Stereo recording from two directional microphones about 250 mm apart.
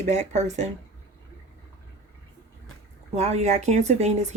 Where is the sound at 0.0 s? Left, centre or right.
Right.